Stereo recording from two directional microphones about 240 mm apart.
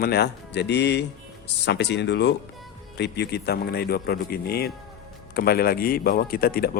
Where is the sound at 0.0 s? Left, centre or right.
Left.